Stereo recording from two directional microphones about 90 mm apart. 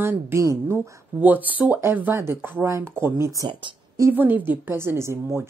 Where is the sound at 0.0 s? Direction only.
25° right (ahead or behind).